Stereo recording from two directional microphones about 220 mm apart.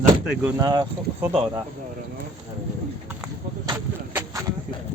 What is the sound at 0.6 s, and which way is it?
Speech, 15° right (ahead or behind).